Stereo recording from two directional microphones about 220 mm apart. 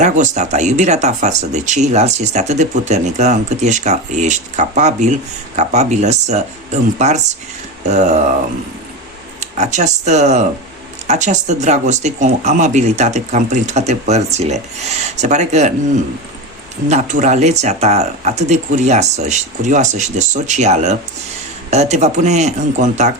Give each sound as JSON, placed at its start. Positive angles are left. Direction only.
{"t": 0.0, "sound": "speech", "side_deg": -30}
{"t": 9.4, "sound": "speech", "side_deg": -30}
{"t": 16.9, "sound": "speech", "side_deg": -35}